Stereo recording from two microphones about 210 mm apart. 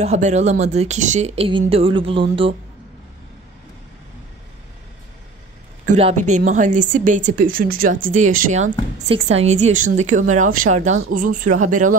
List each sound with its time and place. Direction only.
0.0 s a woman's voice: 30° right (ahead or behind)
5.9 s a woman's voice: 30° right (ahead or behind)